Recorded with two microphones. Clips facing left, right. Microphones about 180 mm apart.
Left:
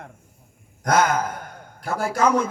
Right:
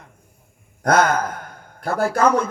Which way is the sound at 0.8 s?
55° right (ahead or behind).